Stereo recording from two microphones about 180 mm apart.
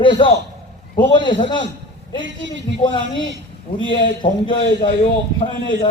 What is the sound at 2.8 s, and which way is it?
A man's voice, 25° left (ahead or behind).